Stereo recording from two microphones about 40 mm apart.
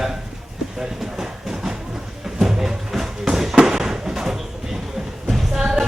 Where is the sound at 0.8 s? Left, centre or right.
Centre.